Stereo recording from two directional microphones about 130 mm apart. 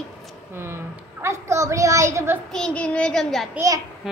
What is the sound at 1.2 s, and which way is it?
A woman's voice, 20° right (ahead or behind).